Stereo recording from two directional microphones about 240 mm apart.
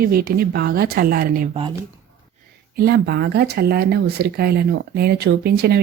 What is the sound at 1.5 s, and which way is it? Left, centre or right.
Speech, centre.